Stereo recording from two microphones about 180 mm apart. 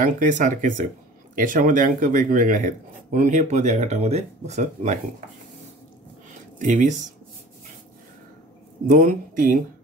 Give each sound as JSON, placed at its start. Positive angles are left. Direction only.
{"t": 0.0, "sound": "speech", "side_deg": -45}
{"t": 6.6, "sound": "speech", "side_deg": -45}
{"t": 8.8, "sound": "speech", "side_deg": -50}